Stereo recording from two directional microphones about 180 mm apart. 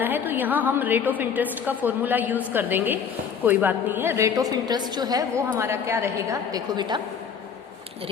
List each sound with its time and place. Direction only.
0.0 s a woman's voice: 10° right (ahead or behind)